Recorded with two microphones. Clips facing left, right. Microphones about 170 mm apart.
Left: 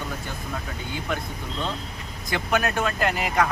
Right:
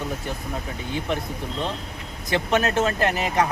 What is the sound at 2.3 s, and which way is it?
Speech, 25° right (ahead or behind).